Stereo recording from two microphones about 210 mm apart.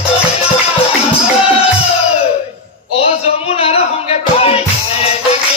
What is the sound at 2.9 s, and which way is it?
Music, 30° left (ahead or behind).